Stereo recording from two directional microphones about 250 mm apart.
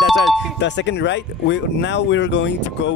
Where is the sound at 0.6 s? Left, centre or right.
Left.